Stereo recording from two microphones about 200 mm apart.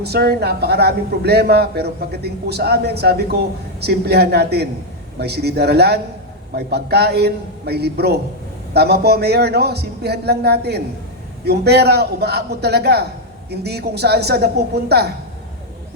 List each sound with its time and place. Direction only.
0.0 s a man's voice: 55° right (ahead or behind)